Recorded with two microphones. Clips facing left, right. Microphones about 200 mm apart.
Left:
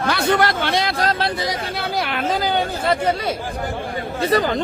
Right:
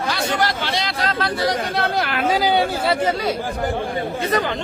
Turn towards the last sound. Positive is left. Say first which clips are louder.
# left 3 dB
turn(degrees=35)  # may be behind; listen again after turning